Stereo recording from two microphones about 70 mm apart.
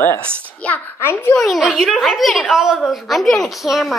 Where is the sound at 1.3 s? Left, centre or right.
Centre.